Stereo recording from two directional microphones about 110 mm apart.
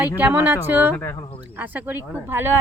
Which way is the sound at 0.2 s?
15° right (ahead or behind).